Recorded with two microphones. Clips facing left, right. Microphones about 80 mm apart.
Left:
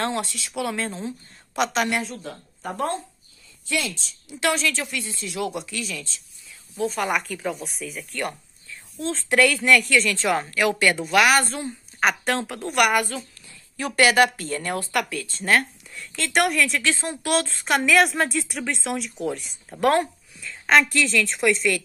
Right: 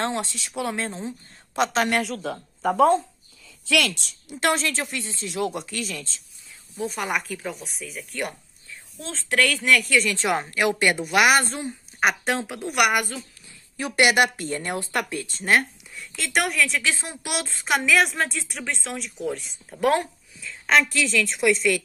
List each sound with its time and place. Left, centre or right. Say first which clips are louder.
0.0 s a woman's voice: left 1 dB; right
3.6 s a woman's voice: right 4 dB; right
4.0 s a woman's voice: even; right
6.8 s a woman's voice: left 3 dB; centre
9.0 s a woman's voice: left 4 dB; centre
10.1 s a woman's voice: left 1 dB; centre
12.0 s a woman's voice: even; centre
15.9 s a woman's voice: left 2 dB; centre